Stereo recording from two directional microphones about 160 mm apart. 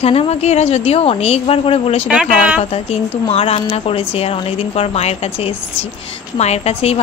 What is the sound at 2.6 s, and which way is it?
Speech, 40° left (ahead or behind).